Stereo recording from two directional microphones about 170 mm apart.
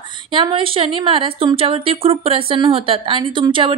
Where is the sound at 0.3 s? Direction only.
30° right (ahead or behind).